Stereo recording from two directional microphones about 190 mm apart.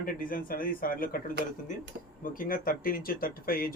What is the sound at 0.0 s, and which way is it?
Speech, 50° left (ahead or behind).